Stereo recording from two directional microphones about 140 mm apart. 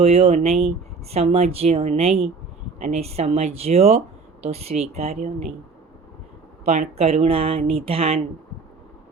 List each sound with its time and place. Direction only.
0.0 s speech: 45° right (ahead or behind)
6.7 s speech: 50° right (ahead or behind)